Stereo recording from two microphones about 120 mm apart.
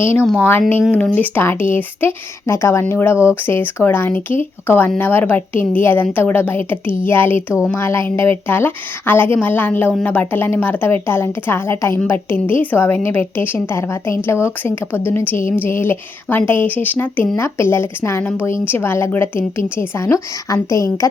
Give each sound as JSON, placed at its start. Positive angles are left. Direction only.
{"t": 0.3, "sound": "a woman's voice", "side_deg": 20}